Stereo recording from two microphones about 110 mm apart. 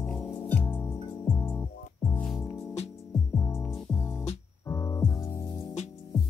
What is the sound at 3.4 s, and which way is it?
Music, 25° left (ahead or behind).